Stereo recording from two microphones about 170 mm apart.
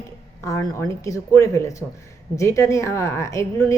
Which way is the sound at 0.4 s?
20° left (ahead or behind).